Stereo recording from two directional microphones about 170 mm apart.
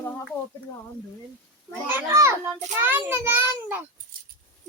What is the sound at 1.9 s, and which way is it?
A child's voice, 15° right (ahead or behind).